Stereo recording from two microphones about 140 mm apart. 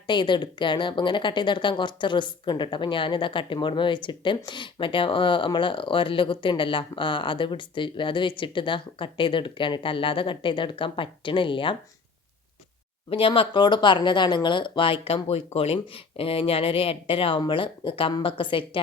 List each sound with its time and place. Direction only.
0.1 s a woman's voice: 35° left (ahead or behind)
13.1 s a woman's voice: 40° left (ahead or behind)